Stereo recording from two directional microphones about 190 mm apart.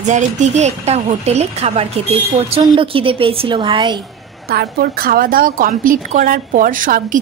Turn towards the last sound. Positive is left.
turn(degrees=-45)  # may be behind; listen again after turning